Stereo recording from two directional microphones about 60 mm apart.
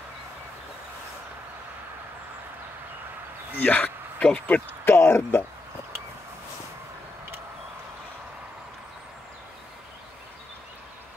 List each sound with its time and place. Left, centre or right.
3.5 s speech: left
4.8 s speech: left